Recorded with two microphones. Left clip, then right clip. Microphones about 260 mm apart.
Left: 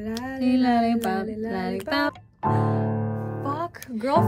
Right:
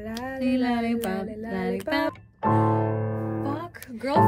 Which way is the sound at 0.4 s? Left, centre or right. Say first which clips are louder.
Left 4 dB; centre.